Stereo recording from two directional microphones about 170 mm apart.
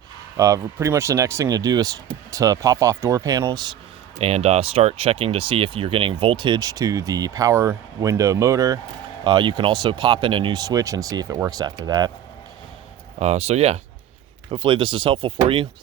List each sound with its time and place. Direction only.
0.3 s speech: 20° right (ahead or behind)
4.2 s speech: 35° right (ahead or behind)
13.1 s speech: 40° right (ahead or behind)